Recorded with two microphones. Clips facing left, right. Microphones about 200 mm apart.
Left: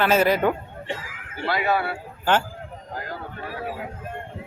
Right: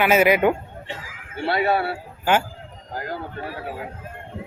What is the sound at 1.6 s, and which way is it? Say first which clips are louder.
Speech: right 1 dB; 30° right (ahead or behind).